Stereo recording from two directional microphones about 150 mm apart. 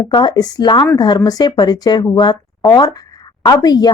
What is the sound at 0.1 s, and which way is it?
Speech, 30° left (ahead or behind).